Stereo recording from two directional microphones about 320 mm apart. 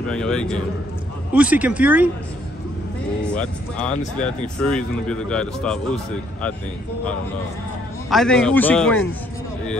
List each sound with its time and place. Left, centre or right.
0.0 s speech: centre
3.3 s speech: centre
8.1 s speech: centre